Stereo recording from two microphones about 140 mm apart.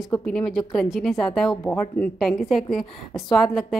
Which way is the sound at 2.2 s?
Centre (ahead or behind).